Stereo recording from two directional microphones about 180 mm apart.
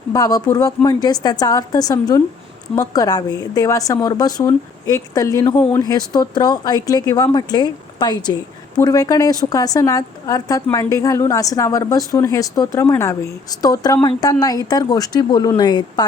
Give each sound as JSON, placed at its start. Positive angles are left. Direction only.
{"t": 0.1, "sound": "speech", "side_deg": 20}